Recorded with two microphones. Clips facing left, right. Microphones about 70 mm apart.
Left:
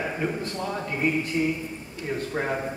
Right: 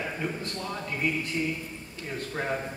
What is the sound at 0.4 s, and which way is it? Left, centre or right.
Speech, centre.